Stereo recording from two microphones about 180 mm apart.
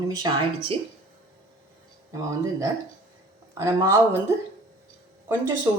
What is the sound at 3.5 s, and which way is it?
Speech, 15° right (ahead or behind).